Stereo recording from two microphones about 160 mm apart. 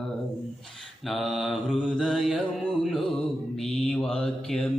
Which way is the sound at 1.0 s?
Centre (ahead or behind).